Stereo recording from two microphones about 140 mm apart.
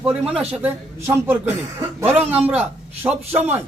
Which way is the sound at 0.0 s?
5° right (ahead or behind).